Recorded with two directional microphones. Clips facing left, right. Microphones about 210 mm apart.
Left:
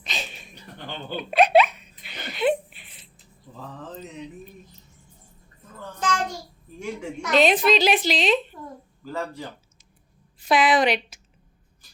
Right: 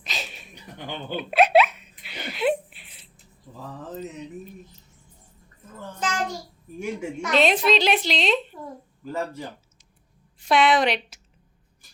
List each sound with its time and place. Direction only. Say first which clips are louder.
0.0 s a sound: left 1 dB; centre (ahead or behind)
0.5 s hiccup: right 2 dB; 15° right (ahead or behind)
6.8 s a woman's voice: right 2 dB; 5° right (ahead or behind)
9.0 s speech: right 1 dB; 20° right (ahead or behind)
10.4 s a woman's voice: even; centre (ahead or behind)